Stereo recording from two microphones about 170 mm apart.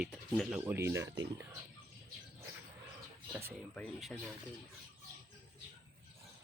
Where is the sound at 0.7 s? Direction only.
15° right (ahead or behind).